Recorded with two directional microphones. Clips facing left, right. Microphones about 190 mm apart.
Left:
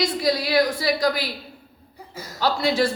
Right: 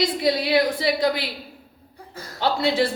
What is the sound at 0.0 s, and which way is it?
Speech, 25° right (ahead or behind).